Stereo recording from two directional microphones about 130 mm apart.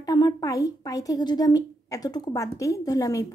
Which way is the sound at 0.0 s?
30° left (ahead or behind).